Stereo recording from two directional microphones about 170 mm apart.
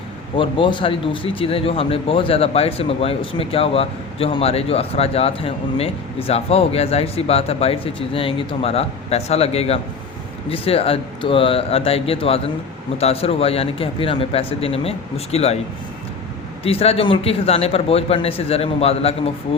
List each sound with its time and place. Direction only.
0.3 s speech: 30° left (ahead or behind)
16.6 s speech: 35° left (ahead or behind)